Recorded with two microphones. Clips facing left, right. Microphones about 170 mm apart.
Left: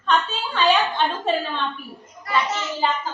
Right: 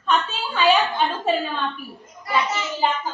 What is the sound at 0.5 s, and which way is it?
A child's voice, 5° right (ahead or behind).